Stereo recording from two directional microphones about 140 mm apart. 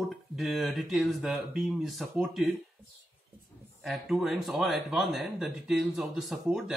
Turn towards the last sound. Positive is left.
turn(degrees=0)  # may be behind; listen again after turning